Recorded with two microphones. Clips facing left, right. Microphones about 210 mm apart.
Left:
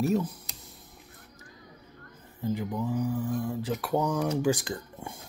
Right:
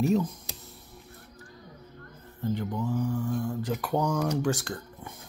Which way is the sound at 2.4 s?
5° left (ahead or behind).